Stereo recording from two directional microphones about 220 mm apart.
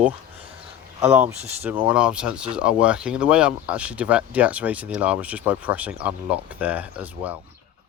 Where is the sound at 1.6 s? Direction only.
5° right (ahead or behind).